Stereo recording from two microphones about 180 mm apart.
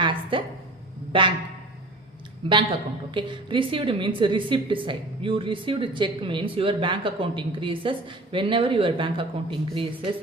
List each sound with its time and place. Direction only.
0.0 s a sound: 30° right (ahead or behind)
1.1 s a woman's voice: 30° right (ahead or behind)
3.1 s a woman's voice: 25° right (ahead or behind)